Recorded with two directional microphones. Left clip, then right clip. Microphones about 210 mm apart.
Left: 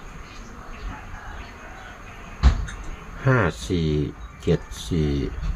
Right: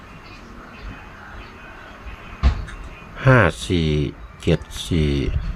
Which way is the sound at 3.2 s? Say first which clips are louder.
Right 6 dB; 25° right (ahead or behind).